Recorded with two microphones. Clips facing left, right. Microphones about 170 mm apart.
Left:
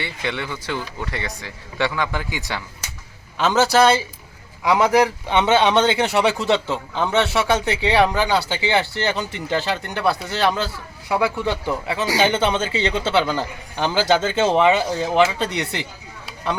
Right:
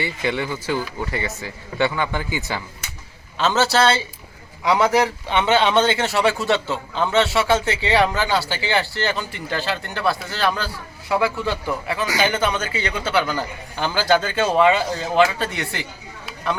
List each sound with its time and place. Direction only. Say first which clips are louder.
0.0 s a man's voice: right 3 dB; 5° right (ahead or behind)
3.3 s a man's voice: left 2 dB; 15° left (ahead or behind)